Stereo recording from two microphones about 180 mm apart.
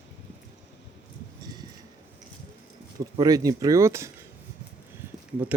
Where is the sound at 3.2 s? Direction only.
20° right (ahead or behind).